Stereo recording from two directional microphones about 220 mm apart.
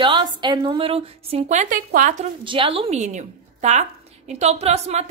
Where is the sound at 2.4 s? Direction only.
25° right (ahead or behind).